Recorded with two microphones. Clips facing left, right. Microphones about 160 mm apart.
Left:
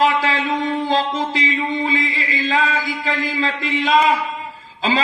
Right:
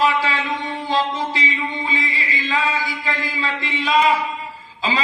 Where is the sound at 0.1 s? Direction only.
45° left (ahead or behind).